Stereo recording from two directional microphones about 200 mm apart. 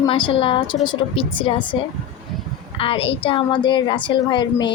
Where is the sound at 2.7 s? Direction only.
25° left (ahead or behind).